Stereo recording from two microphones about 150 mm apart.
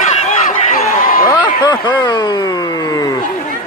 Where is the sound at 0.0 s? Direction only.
55° left (ahead or behind).